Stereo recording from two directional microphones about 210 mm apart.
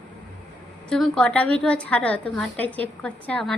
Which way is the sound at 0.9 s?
Centre (ahead or behind).